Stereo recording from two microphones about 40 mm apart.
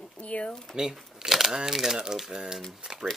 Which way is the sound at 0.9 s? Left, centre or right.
Centre.